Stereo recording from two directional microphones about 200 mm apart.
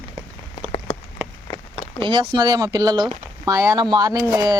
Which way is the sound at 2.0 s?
25° right (ahead or behind).